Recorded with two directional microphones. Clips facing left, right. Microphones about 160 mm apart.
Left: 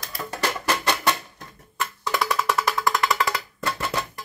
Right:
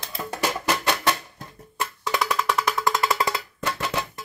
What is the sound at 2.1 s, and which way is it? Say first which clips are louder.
Music: even; centre (ahead or behind).